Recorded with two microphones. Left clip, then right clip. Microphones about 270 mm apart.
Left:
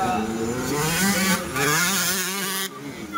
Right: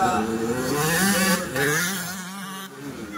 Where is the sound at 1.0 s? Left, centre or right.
Centre.